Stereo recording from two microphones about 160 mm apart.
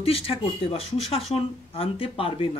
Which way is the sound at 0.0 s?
35° left (ahead or behind).